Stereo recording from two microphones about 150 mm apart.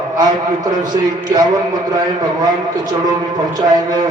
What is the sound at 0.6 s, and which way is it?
A man's voice, 25° right (ahead or behind).